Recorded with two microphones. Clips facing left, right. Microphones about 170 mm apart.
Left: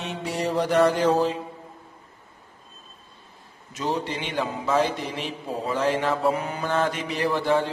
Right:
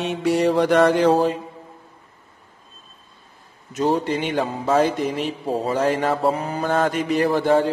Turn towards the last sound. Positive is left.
turn(degrees=-50)  # may be behind; listen again after turning